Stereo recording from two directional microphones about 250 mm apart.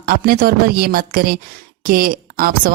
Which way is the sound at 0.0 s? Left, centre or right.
Right.